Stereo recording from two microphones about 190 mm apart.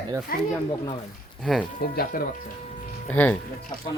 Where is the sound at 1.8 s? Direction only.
50° left (ahead or behind).